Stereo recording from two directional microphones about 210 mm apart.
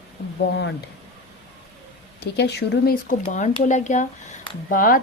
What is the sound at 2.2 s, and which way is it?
A woman's voice, 50° left (ahead or behind).